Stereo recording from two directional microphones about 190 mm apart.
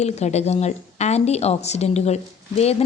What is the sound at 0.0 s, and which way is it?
A woman's voice, 35° left (ahead or behind).